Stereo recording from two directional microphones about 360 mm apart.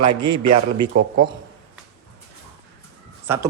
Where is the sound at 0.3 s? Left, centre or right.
Right.